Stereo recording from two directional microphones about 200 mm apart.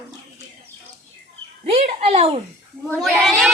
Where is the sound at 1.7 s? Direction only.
30° right (ahead or behind).